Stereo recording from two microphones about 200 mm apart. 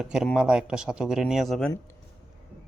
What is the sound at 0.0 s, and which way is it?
Speech, centre (ahead or behind).